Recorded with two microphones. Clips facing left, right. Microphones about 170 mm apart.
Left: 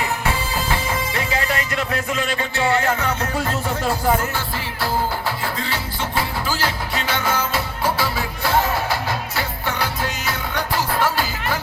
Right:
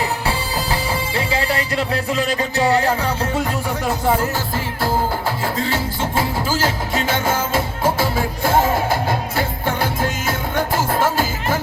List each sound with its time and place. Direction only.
0.3 s music: 30° right (ahead or behind)
3.4 s speech: 15° right (ahead or behind)
5.6 s music: 45° right (ahead or behind)